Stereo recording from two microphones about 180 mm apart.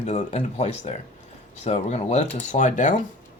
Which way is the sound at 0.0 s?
40° left (ahead or behind).